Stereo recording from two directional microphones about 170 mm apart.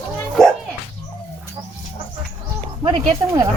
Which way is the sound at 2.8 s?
30° right (ahead or behind).